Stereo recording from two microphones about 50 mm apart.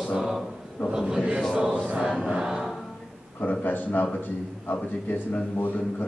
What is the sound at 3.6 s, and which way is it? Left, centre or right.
Speech, left.